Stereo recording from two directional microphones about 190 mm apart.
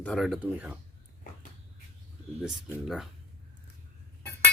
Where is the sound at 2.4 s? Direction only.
Centre (ahead or behind).